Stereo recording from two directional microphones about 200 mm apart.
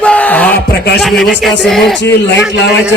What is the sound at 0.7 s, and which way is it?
Speech, 55° left (ahead or behind).